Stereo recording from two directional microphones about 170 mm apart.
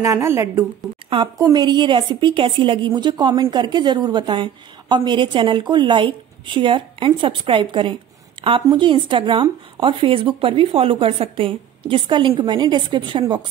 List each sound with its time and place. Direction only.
0.0 s a woman's voice: 15° right (ahead or behind)
1.1 s a woman's voice: 25° right (ahead or behind)